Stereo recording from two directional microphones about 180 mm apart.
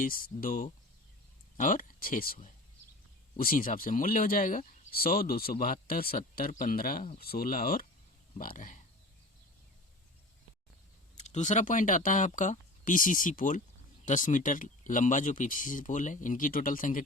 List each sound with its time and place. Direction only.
0.0 s speech: 50° left (ahead or behind)
11.2 s speech: 40° left (ahead or behind)